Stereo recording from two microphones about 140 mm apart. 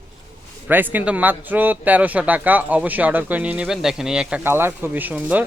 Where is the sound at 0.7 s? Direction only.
15° right (ahead or behind).